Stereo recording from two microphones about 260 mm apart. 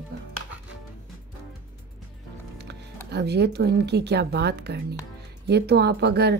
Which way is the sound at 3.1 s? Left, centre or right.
Right.